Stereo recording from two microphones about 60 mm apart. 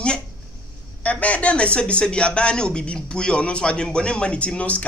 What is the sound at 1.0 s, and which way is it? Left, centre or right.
Speech, left.